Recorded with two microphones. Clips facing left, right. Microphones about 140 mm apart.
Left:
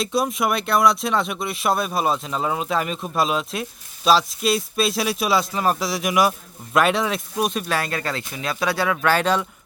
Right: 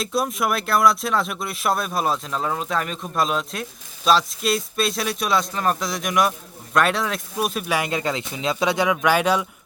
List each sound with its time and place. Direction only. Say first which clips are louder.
0.0 s speech: left 1 dB; centre (ahead or behind)
7.7 s speech: right 1 dB; 15° right (ahead or behind)